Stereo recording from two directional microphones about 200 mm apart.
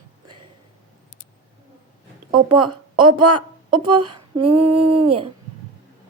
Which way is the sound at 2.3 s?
25° right (ahead or behind).